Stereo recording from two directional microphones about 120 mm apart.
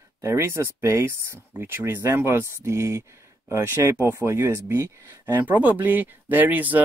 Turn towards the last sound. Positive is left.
turn(degrees=-15)  # may be behind; listen again after turning